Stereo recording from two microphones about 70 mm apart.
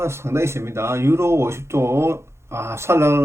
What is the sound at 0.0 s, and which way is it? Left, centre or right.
Speech, right.